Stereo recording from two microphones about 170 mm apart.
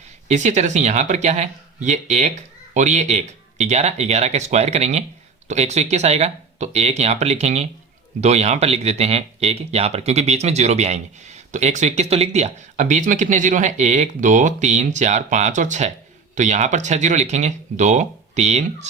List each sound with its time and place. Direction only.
0.3 s speech: 45° right (ahead or behind)